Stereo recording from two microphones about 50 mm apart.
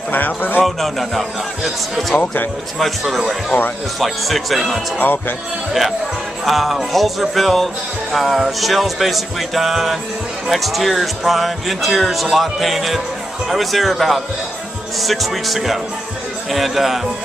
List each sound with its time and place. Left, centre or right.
0.1 s speech: left
0.7 s speech: centre
4.9 s speech: left
5.7 s speech: centre